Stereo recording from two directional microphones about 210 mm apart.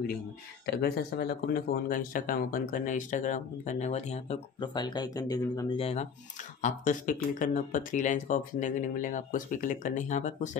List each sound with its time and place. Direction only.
0.7 s speech: 50° left (ahead or behind)